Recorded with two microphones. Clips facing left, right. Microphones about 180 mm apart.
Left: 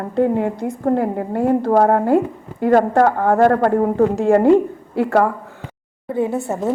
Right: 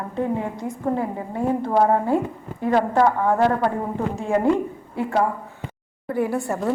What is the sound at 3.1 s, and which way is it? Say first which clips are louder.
Speech: left 3 dB; 75° left (ahead or behind).